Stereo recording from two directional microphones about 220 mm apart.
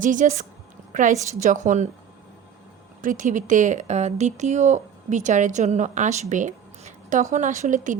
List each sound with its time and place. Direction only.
0.0 s speech: 35° right (ahead or behind)
3.0 s speech: 35° right (ahead or behind)